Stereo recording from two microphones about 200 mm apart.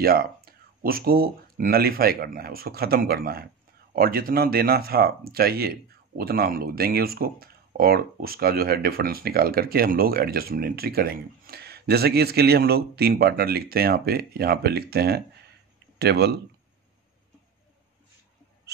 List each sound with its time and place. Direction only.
0.0 s speech: 50° right (ahead or behind)